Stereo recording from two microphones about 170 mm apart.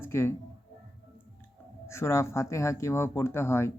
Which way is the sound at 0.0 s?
15° left (ahead or behind).